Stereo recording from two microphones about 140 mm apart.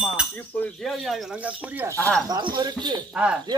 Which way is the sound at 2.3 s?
30° right (ahead or behind).